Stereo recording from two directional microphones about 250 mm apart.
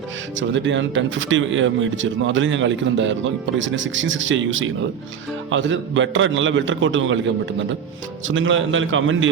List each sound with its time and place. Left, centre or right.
0.3 s speech: right
8.3 s speech: right